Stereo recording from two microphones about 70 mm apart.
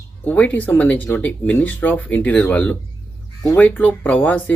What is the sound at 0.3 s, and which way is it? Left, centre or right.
Speech, left.